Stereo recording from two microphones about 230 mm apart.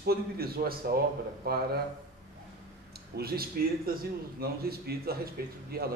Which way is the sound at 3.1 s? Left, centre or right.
Right.